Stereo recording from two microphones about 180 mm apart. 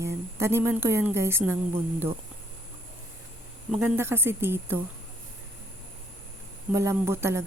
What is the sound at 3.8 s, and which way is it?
Speech, 15° right (ahead or behind).